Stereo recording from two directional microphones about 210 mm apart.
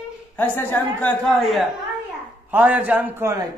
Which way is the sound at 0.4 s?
10° left (ahead or behind).